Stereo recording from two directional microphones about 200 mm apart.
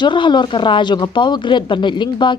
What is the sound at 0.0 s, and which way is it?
Speech, 25° left (ahead or behind).